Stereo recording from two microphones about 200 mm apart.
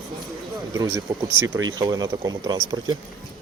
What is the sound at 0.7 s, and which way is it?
Speech, 15° right (ahead or behind).